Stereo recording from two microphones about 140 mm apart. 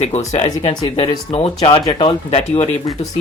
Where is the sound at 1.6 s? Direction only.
30° left (ahead or behind).